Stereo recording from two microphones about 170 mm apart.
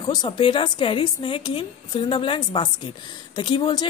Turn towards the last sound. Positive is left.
turn(degrees=25)  # may be behind; listen again after turning